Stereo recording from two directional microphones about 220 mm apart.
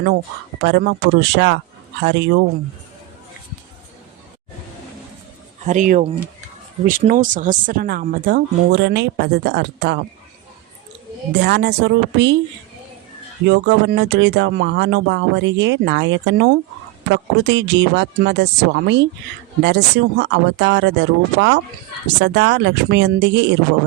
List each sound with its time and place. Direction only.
0.6 s speech: 50° right (ahead or behind)
5.6 s speech: 35° right (ahead or behind)
11.3 s speech: 50° right (ahead or behind)
13.4 s speech: 55° right (ahead or behind)